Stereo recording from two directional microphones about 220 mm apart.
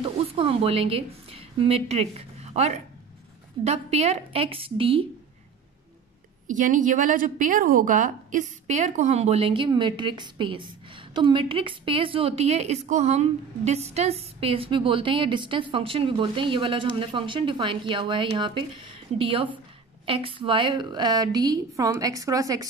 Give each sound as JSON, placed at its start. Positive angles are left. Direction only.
{"t": 0.0, "sound": "a woman's voice", "side_deg": -25}
{"t": 6.4, "sound": "a woman's voice", "side_deg": -35}